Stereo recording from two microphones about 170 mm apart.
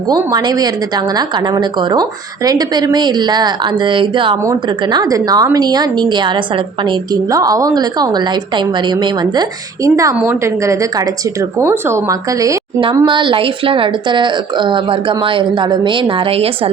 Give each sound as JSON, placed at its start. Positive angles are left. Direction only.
{"t": 0.1, "sound": "a woman's voice", "side_deg": -25}
{"t": 9.8, "sound": "a woman's voice", "side_deg": -20}